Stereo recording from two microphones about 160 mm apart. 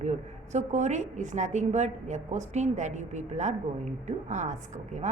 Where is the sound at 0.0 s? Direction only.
45° right (ahead or behind).